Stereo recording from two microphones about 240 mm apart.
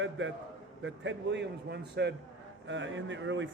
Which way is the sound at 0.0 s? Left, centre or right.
Right.